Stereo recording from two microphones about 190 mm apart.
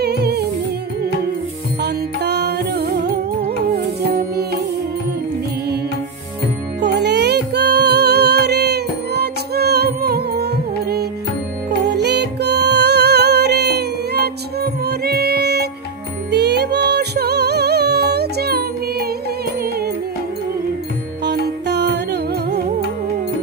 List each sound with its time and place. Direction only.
0.0 s music: 60° right (ahead or behind)
1.8 s music: 60° right (ahead or behind)
6.8 s music: 60° right (ahead or behind)
21.2 s music: 65° right (ahead or behind)